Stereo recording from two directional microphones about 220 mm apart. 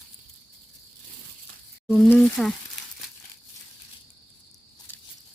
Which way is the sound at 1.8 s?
5° left (ahead or behind).